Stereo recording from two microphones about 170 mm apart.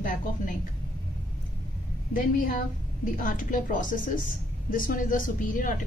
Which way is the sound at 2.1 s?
55° left (ahead or behind).